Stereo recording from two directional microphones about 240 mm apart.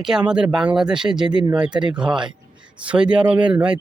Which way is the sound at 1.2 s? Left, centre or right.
Centre.